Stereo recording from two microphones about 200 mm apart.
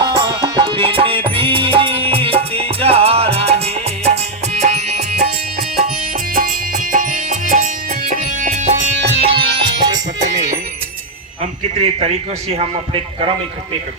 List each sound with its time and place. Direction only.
0.0 s music: 15° right (ahead or behind)
6.3 s music: 45° right (ahead or behind)
9.0 s music: 55° right (ahead or behind)
9.2 s music: 25° right (ahead or behind)
11.8 s a man's voice: 30° right (ahead or behind)